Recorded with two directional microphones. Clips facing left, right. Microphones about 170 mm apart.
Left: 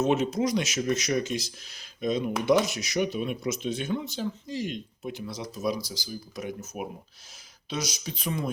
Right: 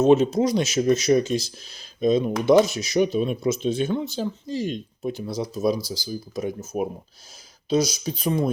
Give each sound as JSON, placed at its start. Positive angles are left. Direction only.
{"t": 0.0, "sound": "speech", "side_deg": -30}